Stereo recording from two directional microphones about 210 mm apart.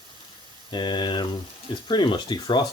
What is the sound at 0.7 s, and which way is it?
Speech, 20° left (ahead or behind).